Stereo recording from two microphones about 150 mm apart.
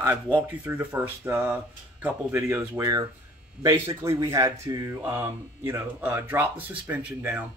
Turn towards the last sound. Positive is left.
turn(degrees=-10)  # may be behind; listen again after turning